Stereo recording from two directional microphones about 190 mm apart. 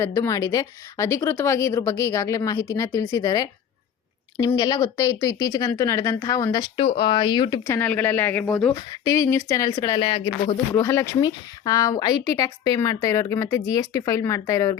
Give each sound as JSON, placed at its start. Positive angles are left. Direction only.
{"t": 0.0, "sound": "a woman's voice", "side_deg": 15}
{"t": 7.8, "sound": "a woman's voice", "side_deg": 10}
{"t": 8.7, "sound": "speech", "side_deg": 20}
{"t": 10.8, "sound": "a woman's voice", "side_deg": 10}